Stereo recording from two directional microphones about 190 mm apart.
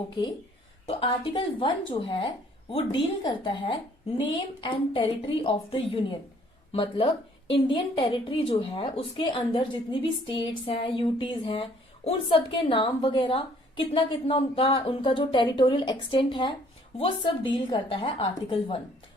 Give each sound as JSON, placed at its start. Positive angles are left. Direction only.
{"t": 0.9, "sound": "a woman's voice", "side_deg": 30}